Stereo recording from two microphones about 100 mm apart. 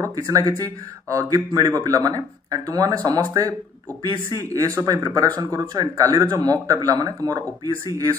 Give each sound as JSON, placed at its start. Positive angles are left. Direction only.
{"t": 0.0, "sound": "speech", "side_deg": -35}